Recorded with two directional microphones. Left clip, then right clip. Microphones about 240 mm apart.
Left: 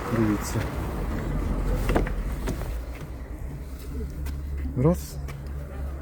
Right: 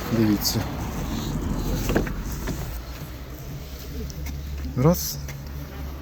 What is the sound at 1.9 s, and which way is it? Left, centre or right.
Vehicle, left.